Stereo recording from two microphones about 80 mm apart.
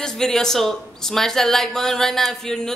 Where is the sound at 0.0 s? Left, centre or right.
Centre.